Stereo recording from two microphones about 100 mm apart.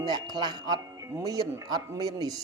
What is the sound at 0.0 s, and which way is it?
Speech, 45° right (ahead or behind).